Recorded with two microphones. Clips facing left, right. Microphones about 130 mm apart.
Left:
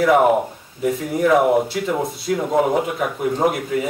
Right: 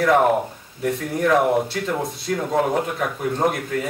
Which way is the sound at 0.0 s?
5° left (ahead or behind).